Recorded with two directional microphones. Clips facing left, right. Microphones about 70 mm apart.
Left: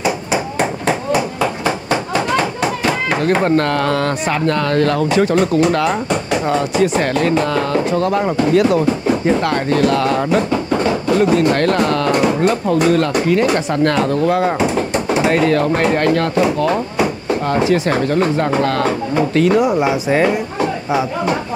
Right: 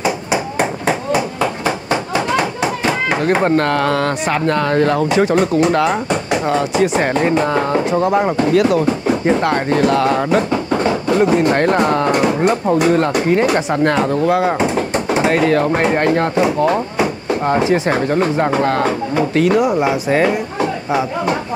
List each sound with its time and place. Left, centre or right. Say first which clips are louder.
0.3 s a sound: even; centre
5.7 s speech: right 1 dB; centre
7.2 s speech: right 1 dB; right; by 10.4 s centre
10.5 s a sound: even; right
10.9 s speech: even; right
15.8 s speech: even; right; by 20.3 s centre